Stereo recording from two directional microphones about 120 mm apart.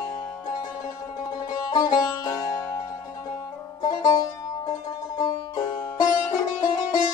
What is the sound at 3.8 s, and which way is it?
Music, 30° left (ahead or behind).